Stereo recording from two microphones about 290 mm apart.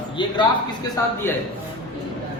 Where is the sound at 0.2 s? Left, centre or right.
Centre.